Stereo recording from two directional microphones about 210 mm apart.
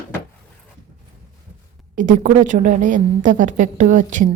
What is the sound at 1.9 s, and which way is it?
A woman's voice, 40° right (ahead or behind).